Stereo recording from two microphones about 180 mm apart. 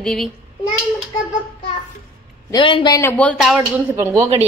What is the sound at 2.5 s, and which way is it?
Speech, 25° left (ahead or behind).